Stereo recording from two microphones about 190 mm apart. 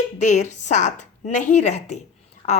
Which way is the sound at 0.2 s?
40° left (ahead or behind).